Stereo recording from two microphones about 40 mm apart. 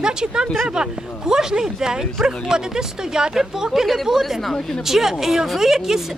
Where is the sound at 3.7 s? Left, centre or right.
Centre.